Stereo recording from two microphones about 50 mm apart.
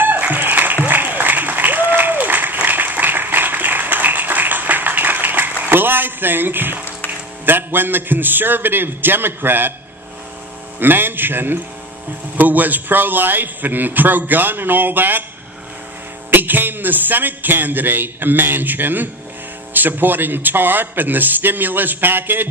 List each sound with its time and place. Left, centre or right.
0.0 s applause: right
5.7 s a sound: right
7.1 s a man's voice: right
10.8 s a man's voice: right
16.3 s a man's voice: right